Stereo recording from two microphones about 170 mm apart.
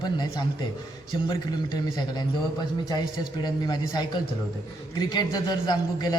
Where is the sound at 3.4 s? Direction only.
25° left (ahead or behind).